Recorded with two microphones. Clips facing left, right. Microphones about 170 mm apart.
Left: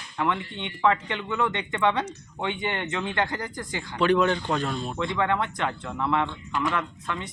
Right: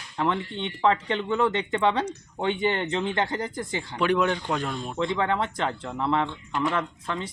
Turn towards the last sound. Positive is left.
turn(degrees=-30)  # may be behind; listen again after turning